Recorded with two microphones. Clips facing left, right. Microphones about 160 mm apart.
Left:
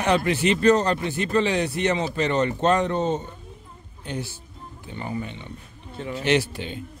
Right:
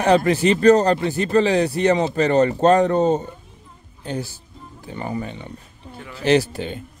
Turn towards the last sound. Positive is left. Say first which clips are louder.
# right 5 dB
turn(degrees=-40)  # may be behind; listen again after turning